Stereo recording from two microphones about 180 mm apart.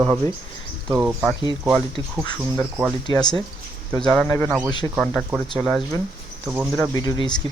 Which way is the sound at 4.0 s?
5° left (ahead or behind).